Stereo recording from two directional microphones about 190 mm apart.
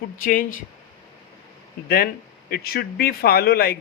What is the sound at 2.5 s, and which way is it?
A man's voice, 55° left (ahead or behind).